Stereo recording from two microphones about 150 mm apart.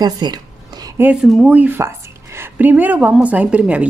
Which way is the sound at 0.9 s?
10° right (ahead or behind).